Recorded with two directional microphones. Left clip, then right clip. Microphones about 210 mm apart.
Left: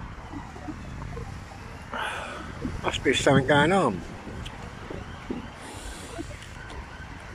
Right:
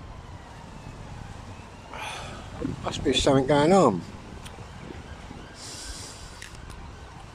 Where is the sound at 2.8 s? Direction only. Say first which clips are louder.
Left 1 dB; 15° right (ahead or behind).